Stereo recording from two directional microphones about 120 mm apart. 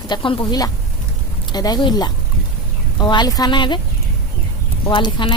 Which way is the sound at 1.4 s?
35° left (ahead or behind).